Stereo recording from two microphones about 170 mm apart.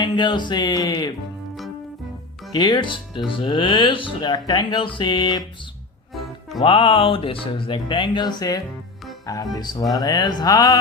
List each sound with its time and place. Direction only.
0.0 s speech: 25° left (ahead or behind)
2.5 s speech: 25° left (ahead or behind)
6.6 s speech: 30° left (ahead or behind)